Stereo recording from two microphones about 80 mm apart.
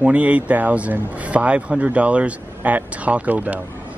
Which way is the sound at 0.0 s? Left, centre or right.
Centre.